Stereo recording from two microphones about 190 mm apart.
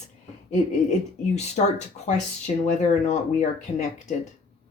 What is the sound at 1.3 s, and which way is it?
Speech, 35° left (ahead or behind).